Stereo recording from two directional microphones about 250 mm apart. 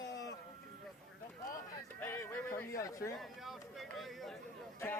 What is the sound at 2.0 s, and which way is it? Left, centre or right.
Speech, centre.